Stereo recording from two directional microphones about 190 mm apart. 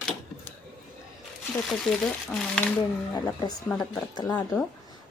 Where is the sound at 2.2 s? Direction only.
5° left (ahead or behind).